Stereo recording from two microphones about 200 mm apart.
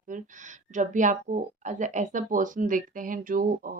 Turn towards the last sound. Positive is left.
turn(degrees=-45)  # may be behind; listen again after turning